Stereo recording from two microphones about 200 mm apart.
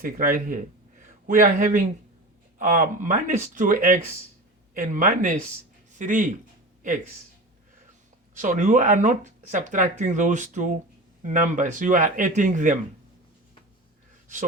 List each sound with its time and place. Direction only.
0.0 s speech: 45° right (ahead or behind)
8.4 s speech: 40° right (ahead or behind)